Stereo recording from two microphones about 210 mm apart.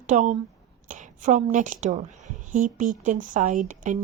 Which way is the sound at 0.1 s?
35° right (ahead or behind).